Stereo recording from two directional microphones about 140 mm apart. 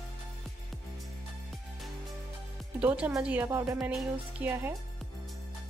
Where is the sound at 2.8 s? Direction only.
10° right (ahead or behind).